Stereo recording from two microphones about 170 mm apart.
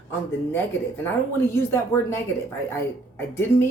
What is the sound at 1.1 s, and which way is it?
A woman's voice, 15° left (ahead or behind).